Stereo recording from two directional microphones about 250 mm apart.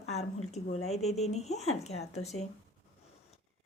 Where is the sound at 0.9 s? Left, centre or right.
Left.